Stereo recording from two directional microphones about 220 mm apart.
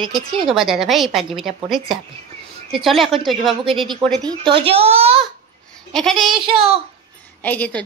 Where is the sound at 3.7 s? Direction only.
20° right (ahead or behind).